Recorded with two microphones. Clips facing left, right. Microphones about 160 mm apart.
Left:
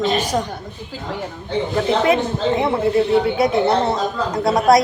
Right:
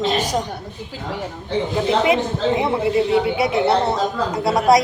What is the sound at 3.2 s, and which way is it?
Speech, 10° right (ahead or behind).